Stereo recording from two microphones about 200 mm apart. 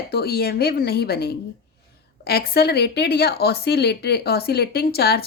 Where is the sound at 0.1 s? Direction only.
50° left (ahead or behind).